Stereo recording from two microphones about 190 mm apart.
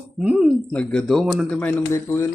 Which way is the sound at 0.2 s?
5° right (ahead or behind).